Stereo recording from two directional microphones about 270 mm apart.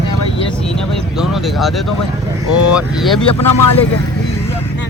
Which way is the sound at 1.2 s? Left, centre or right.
Centre.